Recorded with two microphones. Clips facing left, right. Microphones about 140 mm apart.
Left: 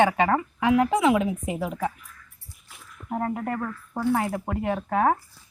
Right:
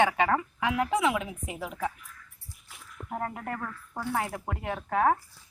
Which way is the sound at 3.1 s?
20° left (ahead or behind).